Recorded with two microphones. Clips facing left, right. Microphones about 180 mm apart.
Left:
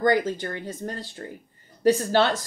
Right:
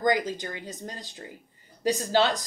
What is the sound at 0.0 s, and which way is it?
Speech, 15° right (ahead or behind).